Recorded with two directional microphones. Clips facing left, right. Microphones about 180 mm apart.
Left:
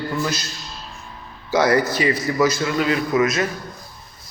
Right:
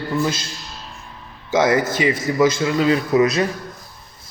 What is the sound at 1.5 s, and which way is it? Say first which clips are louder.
A man's voice: even; 20° right (ahead or behind).